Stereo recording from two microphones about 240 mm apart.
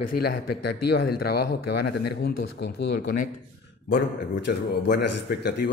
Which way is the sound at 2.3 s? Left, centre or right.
Left.